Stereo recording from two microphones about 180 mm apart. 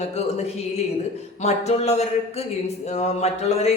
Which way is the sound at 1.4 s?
35° left (ahead or behind).